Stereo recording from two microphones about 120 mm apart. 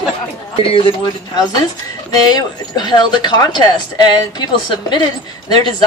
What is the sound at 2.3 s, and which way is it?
A woman's voice, 35° left (ahead or behind).